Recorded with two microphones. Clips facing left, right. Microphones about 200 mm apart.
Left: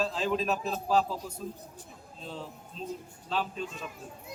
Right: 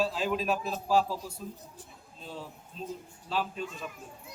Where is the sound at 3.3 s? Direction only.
5° right (ahead or behind).